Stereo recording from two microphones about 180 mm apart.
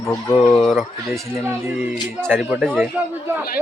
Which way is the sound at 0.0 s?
20° left (ahead or behind).